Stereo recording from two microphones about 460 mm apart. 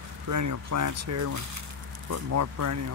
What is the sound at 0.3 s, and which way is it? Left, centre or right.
Speech, right.